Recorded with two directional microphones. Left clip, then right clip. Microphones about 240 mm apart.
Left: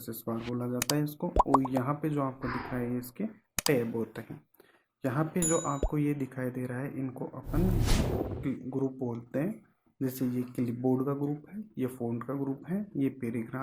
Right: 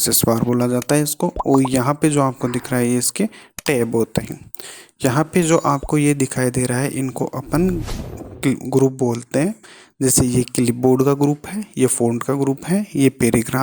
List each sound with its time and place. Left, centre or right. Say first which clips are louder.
0.0 s speech: right 19 dB; right
7.8 s speech: right 2 dB; centre
8.4 s speech: right 17 dB; right